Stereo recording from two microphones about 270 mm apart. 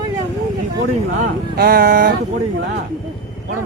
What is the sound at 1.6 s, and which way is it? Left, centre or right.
Speech, right.